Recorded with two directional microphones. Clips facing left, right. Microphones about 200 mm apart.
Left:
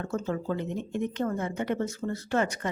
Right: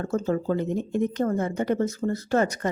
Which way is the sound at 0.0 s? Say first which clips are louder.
Right 5 dB; 40° right (ahead or behind).